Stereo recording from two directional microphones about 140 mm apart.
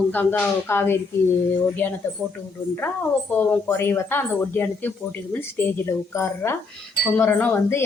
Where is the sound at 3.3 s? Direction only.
15° left (ahead or behind).